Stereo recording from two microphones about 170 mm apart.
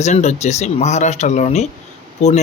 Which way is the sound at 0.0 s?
40° left (ahead or behind).